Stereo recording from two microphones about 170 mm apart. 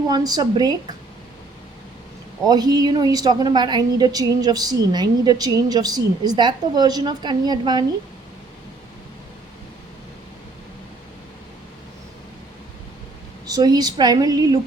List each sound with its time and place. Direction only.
0.1 s a woman's voice: 25° right (ahead or behind)
2.5 s a woman's voice: 25° right (ahead or behind)
13.5 s a woman's voice: 25° right (ahead or behind)